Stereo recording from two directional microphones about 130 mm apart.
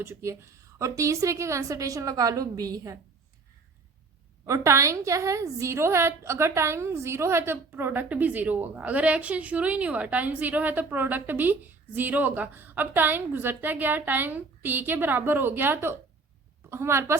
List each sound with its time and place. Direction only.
0.0 s a woman's voice: 20° right (ahead or behind)
4.4 s a woman's voice: 25° right (ahead or behind)